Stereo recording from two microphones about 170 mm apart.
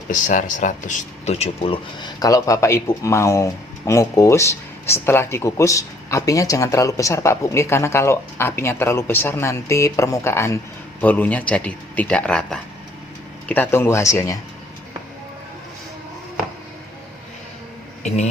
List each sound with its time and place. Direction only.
0.1 s speech: 50° left (ahead or behind); by 14.3 s 15° left (ahead or behind)